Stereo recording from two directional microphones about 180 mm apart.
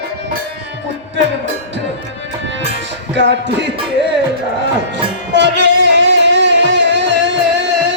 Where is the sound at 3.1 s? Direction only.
75° right (ahead or behind).